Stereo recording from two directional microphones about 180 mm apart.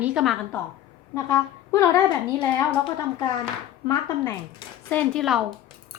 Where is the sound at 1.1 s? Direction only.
15° left (ahead or behind).